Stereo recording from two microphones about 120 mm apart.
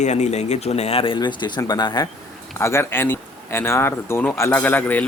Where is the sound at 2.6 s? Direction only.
20° left (ahead or behind).